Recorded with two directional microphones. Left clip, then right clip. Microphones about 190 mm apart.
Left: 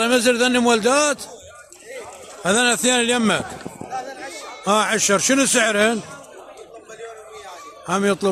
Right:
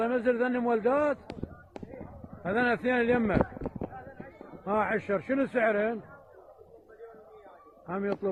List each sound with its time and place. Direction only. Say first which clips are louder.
0.0 s a man's voice: left 10 dB; 35° left (ahead or behind)
2.4 s a man's voice: left 10 dB; 35° left (ahead or behind)
4.6 s a man's voice: left 10 dB; 35° left (ahead or behind)
7.9 s a man's voice: left 12 dB; 35° left (ahead or behind)